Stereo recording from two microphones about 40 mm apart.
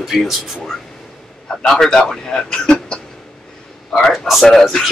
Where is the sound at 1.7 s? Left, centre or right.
Centre.